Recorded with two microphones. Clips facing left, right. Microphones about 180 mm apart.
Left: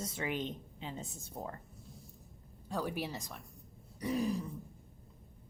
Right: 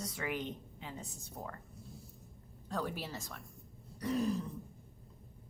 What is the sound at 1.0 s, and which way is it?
Speech, centre (ahead or behind).